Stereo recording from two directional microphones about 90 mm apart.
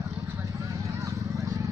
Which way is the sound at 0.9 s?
35° right (ahead or behind).